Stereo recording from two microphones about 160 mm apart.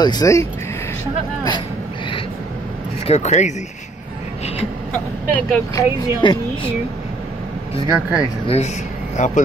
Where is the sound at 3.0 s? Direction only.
45° left (ahead or behind).